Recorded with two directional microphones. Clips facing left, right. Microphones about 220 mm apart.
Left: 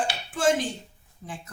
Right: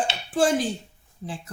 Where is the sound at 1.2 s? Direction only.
25° right (ahead or behind).